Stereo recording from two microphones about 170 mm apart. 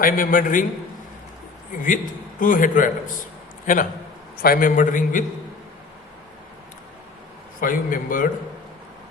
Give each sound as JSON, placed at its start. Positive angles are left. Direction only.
{"t": 0.0, "sound": "a man's voice", "side_deg": 55}
{"t": 1.7, "sound": "a man's voice", "side_deg": 50}
{"t": 7.6, "sound": "a man's voice", "side_deg": 55}